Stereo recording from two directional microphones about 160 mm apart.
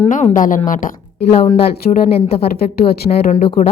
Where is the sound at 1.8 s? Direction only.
45° left (ahead or behind).